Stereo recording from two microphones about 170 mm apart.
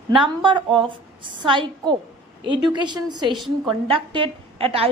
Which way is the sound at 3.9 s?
30° right (ahead or behind).